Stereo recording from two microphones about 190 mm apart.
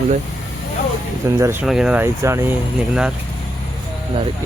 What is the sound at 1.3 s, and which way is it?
Speech, 15° right (ahead or behind).